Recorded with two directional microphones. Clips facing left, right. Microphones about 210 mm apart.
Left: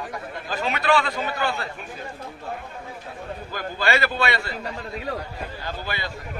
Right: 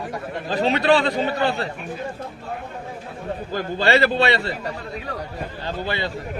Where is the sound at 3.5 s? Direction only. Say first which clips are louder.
Right 5 dB; 30° right (ahead or behind).